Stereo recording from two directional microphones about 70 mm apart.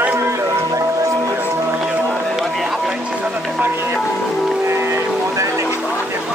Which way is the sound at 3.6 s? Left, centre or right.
Right.